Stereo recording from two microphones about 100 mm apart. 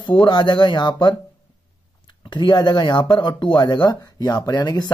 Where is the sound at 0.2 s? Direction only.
50° left (ahead or behind).